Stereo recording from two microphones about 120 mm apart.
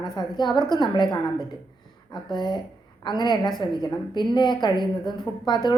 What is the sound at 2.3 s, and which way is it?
Speech, 40° left (ahead or behind).